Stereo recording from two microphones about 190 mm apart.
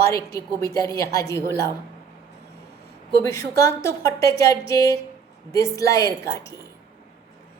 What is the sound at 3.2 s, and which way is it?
A woman's voice, 15° left (ahead or behind).